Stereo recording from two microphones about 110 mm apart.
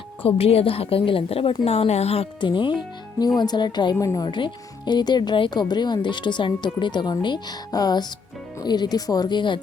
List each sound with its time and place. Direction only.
0.3 s a woman's voice: 65° left (ahead or behind)
1.6 s a woman's voice: 70° left (ahead or behind)
2.4 s speech: 45° left (ahead or behind)
3.9 s speech: 30° left (ahead or behind)
4.3 s speech: 45° left (ahead or behind)